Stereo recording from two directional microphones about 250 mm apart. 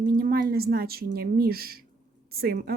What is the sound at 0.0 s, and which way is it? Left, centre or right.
Speech, right.